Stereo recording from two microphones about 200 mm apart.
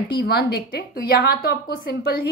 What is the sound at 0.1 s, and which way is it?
Speech, 55° left (ahead or behind).